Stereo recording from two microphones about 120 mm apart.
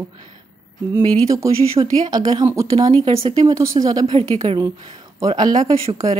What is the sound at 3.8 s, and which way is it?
Speech, 35° right (ahead or behind).